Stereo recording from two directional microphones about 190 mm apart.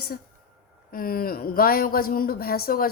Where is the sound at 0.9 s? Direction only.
50° left (ahead or behind).